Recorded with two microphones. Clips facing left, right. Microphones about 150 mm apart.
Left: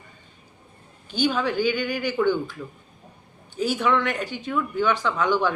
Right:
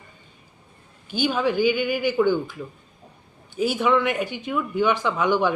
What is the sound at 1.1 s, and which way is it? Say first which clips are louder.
Speech: right 1 dB; 10° right (ahead or behind).